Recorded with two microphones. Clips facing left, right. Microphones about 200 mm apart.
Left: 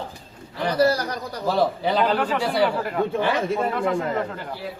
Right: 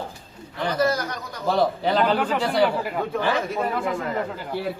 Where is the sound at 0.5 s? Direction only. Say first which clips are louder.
Left 3 dB; 35° left (ahead or behind).